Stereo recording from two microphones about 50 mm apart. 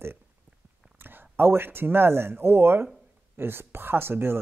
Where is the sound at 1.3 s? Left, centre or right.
Right.